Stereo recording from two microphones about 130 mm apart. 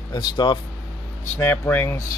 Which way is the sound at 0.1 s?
35° left (ahead or behind).